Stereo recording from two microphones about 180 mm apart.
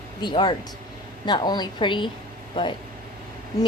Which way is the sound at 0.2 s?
25° left (ahead or behind).